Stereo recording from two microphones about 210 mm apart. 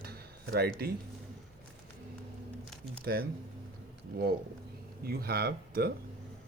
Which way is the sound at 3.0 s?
45° right (ahead or behind).